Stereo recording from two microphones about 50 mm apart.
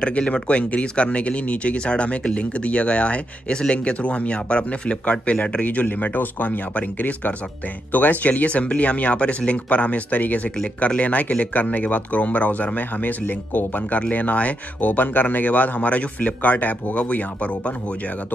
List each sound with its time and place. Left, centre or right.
0.0 s speech: left